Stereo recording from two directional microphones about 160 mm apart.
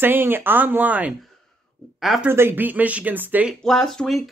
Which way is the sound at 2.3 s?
15° right (ahead or behind).